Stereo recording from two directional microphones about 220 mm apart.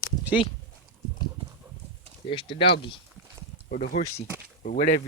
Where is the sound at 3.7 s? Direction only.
40° left (ahead or behind).